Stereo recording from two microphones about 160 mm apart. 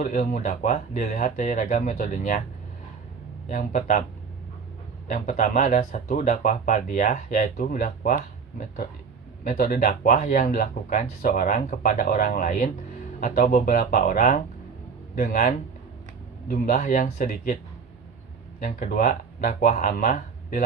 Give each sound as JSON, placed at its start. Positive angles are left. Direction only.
{"t": 0.0, "sound": "speech", "side_deg": 55}
{"t": 3.5, "sound": "speech", "side_deg": 55}
{"t": 5.0, "sound": "speech", "side_deg": 50}
{"t": 18.6, "sound": "speech", "side_deg": 60}